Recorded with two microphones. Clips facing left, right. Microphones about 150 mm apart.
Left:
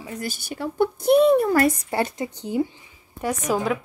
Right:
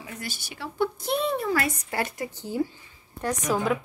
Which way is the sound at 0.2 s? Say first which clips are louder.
Left 9 dB; 45° left (ahead or behind).